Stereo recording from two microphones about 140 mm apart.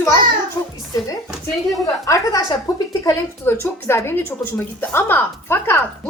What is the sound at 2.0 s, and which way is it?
A woman's voice, 25° left (ahead or behind).